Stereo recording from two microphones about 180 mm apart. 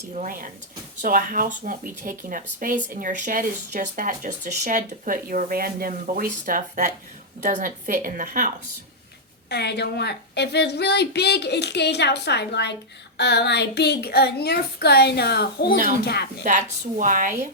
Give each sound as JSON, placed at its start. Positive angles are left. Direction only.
{"t": 0.1, "sound": "speech", "side_deg": -45}
{"t": 9.5, "sound": "a child's voice", "side_deg": 65}
{"t": 16.4, "sound": "speech", "side_deg": -45}